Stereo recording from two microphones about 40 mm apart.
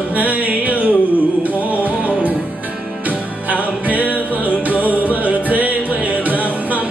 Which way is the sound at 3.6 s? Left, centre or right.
Right.